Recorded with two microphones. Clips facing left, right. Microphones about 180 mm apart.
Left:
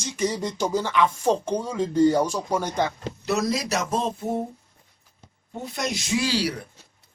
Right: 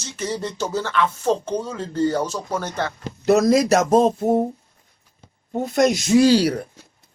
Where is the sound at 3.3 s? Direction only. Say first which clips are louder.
Right 10 dB; 45° right (ahead or behind).